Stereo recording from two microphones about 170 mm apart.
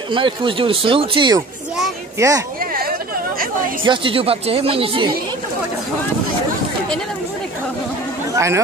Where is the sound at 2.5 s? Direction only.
60° right (ahead or behind).